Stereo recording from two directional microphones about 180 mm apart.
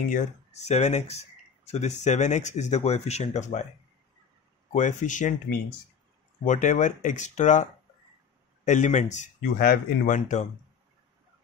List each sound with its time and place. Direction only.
0.1 s speech: 40° left (ahead or behind)
4.7 s speech: 45° left (ahead or behind)
6.4 s speech: 45° left (ahead or behind)
8.6 s speech: 40° left (ahead or behind)